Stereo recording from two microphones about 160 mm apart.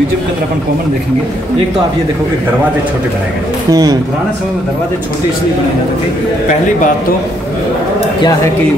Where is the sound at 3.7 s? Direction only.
25° right (ahead or behind).